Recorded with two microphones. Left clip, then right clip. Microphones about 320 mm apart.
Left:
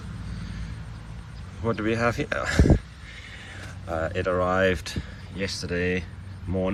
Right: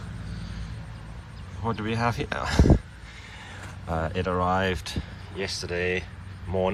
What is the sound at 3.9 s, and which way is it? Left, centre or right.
Speech, centre.